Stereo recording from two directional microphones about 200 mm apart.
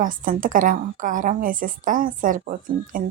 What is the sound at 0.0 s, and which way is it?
A woman's voice, 40° right (ahead or behind).